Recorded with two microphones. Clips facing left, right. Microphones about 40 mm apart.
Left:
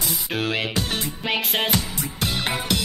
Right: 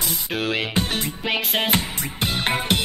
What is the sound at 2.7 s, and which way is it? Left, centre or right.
Music, right.